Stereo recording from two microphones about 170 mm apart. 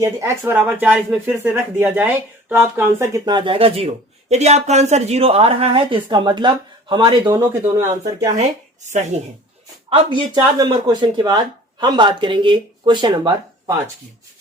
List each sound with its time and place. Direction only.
0.0 s speech: 15° right (ahead or behind)
8.4 s speech: 45° right (ahead or behind)
9.9 s speech: 30° right (ahead or behind)